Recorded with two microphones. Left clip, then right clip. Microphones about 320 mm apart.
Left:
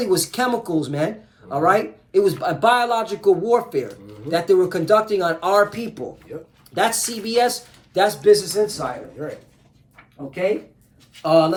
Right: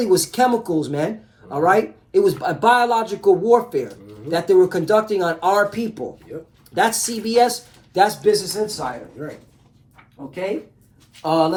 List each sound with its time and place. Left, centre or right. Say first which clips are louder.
0.0 s speech: right 3 dB; centre
11.2 s speech: left 2 dB; centre